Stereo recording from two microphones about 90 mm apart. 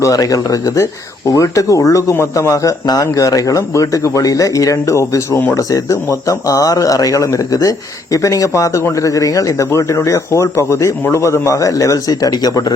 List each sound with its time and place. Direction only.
0.0 s speech: 40° left (ahead or behind)